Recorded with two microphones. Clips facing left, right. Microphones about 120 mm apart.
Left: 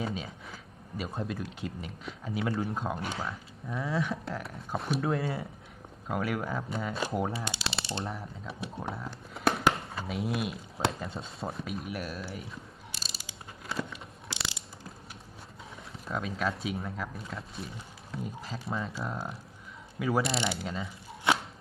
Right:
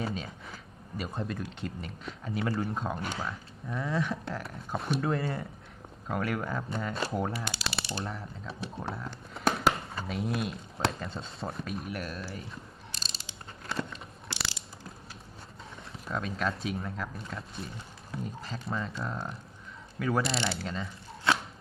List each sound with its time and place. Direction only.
0.0 s speech: 5° left (ahead or behind)
7.1 s mechanisms: 5° left (ahead or behind)
7.3 s typing: 25° left (ahead or behind)
8.0 s speech: centre (ahead or behind)
12.9 s ratchet: 10° left (ahead or behind)
15.7 s speech: 5° left (ahead or behind)
20.0 s mechanisms: 10° left (ahead or behind)